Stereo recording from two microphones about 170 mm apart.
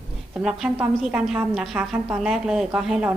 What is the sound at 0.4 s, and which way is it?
A woman's voice, 5° right (ahead or behind).